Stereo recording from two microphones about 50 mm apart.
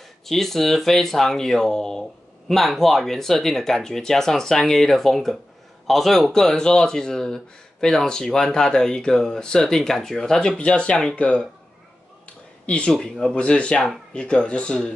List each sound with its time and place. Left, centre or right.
0.3 s speech: centre; by 11.4 s left
12.6 s speech: left